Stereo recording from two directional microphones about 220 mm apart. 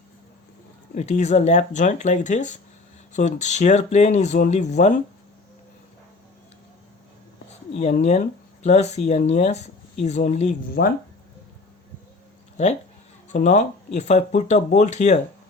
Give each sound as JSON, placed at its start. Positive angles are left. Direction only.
{"t": 0.9, "sound": "speech", "side_deg": 30}
{"t": 7.7, "sound": "speech", "side_deg": 30}
{"t": 10.8, "sound": "speech", "side_deg": 50}
{"t": 13.3, "sound": "speech", "side_deg": 35}